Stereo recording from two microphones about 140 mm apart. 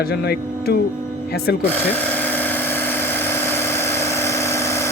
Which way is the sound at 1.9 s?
15° left (ahead or behind).